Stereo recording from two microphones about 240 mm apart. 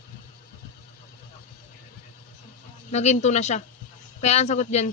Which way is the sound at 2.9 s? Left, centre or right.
Left.